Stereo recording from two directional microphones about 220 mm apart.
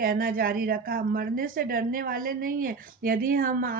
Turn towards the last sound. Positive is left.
turn(degrees=-40)  # may be behind; listen again after turning